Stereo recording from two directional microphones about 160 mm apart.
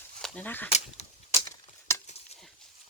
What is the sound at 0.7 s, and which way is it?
Speech, 40° left (ahead or behind).